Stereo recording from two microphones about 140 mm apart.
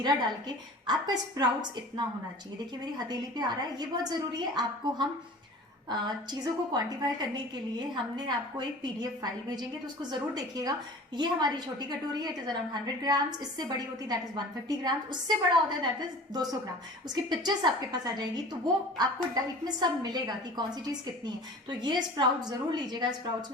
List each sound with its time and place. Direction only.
0.0 s a woman's voice: 30° right (ahead or behind)